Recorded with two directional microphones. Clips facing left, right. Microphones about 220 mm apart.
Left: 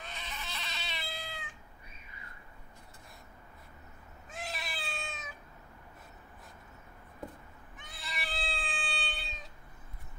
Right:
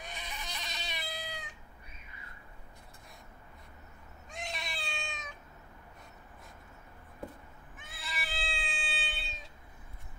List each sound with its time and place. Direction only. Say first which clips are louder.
0.0 s cat: right 1 dB; 15° right (ahead or behind)
4.3 s cat: even; 5° left (ahead or behind)
7.7 s cat: even; centre (ahead or behind)